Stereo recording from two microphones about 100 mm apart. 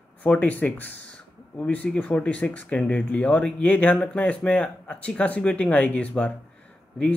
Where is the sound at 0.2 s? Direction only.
15° left (ahead or behind).